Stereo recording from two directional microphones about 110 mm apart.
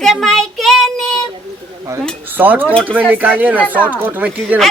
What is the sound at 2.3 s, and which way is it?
Speech, 15° right (ahead or behind).